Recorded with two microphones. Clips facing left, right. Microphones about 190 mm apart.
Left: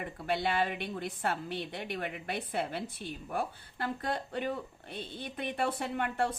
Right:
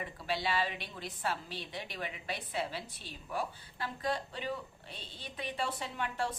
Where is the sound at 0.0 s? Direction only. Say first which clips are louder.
Left 4 dB; 55° left (ahead or behind).